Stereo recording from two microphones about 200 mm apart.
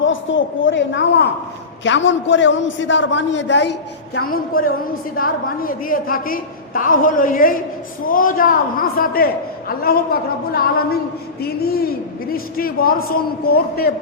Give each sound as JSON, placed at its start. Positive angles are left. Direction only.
{"t": 0.0, "sound": "a woman's voice", "side_deg": 70}
{"t": 4.3, "sound": "a man's voice", "side_deg": 45}